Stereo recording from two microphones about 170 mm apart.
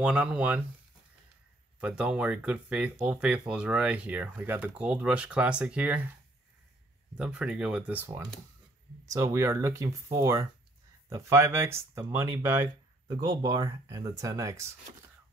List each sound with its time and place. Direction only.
0.0 s speech: 5° right (ahead or behind)
1.8 s speech: 10° right (ahead or behind)
7.2 s speech: 5° right (ahead or behind)